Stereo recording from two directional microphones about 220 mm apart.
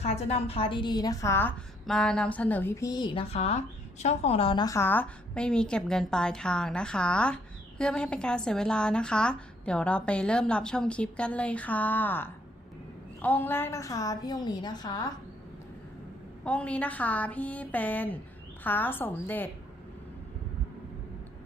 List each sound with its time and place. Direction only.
0.0 s a woman's voice: 30° left (ahead or behind)
16.4 s a woman's voice: 5° left (ahead or behind)